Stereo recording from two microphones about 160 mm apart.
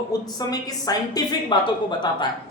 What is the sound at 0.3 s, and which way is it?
A woman's voice, 25° left (ahead or behind).